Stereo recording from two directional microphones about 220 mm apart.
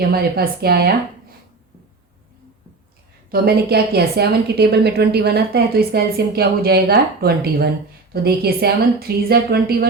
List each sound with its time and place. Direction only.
0.1 s a woman's voice: 45° right (ahead or behind)
3.2 s a woman's voice: 45° right (ahead or behind)